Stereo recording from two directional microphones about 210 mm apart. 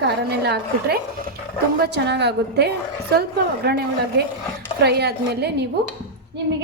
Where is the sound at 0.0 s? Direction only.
50° right (ahead or behind).